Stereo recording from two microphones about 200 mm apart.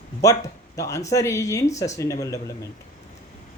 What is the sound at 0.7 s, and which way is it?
Speech, 15° left (ahead or behind).